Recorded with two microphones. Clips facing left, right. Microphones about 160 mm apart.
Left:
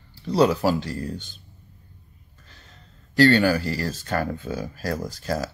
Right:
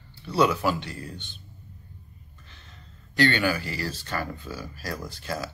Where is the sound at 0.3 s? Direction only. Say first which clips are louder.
Left 4 dB; 35° left (ahead or behind).